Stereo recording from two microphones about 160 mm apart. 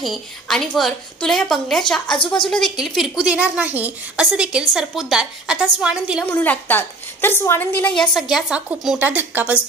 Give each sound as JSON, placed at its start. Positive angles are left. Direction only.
{"t": 0.0, "sound": "a woman's voice", "side_deg": 0}
{"t": 2.1, "sound": "a woman's voice", "side_deg": 30}
{"t": 2.5, "sound": "a woman's voice", "side_deg": 0}
{"t": 6.3, "sound": "a woman's voice", "side_deg": 10}